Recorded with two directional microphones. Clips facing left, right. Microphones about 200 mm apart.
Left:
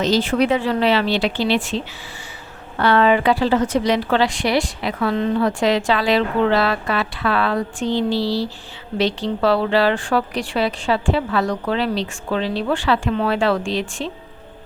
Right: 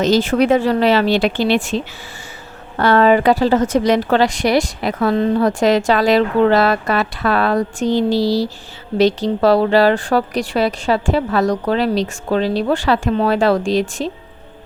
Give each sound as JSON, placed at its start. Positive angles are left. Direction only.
{"t": 0.0, "sound": "a woman's voice", "side_deg": -45}